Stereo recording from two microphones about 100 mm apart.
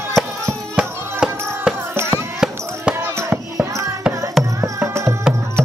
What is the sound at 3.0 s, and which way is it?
Music, 25° right (ahead or behind).